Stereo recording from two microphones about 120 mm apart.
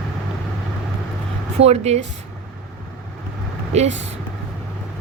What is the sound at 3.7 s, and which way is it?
Speech, 65° right (ahead or behind).